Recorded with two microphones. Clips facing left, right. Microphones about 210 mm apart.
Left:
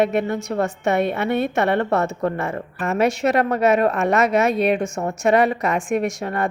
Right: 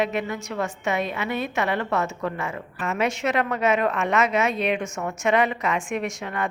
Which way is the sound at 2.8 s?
40° left (ahead or behind).